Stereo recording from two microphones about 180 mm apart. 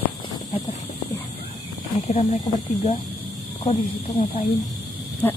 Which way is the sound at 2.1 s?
40° left (ahead or behind).